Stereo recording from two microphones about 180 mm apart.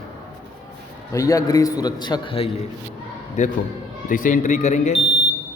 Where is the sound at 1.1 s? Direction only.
15° left (ahead or behind).